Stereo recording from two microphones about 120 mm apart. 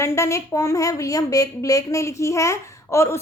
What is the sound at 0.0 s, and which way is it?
A woman's voice, 25° left (ahead or behind).